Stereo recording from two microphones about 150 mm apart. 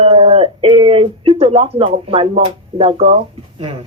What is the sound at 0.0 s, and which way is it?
Speech, 40° right (ahead or behind).